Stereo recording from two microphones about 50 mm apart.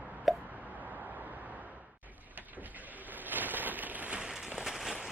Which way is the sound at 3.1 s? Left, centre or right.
Right.